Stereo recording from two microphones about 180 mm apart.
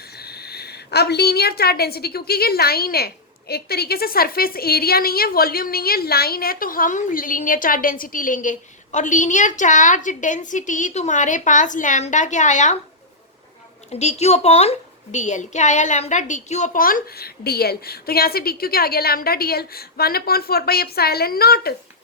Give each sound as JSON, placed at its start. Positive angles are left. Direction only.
{"t": 0.2, "sound": "a woman's voice", "side_deg": 60}
{"t": 13.9, "sound": "a woman's voice", "side_deg": 35}